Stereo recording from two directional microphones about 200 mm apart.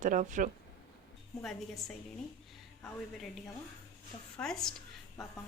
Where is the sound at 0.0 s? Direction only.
40° right (ahead or behind).